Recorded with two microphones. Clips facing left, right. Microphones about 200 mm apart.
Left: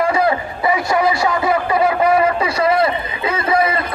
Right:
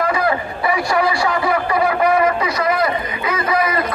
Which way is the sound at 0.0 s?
25° left (ahead or behind).